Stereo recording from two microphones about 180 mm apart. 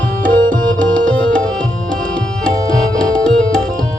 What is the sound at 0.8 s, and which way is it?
Tabla, 5° left (ahead or behind).